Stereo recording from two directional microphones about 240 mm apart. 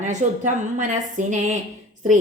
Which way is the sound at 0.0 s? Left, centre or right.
Right.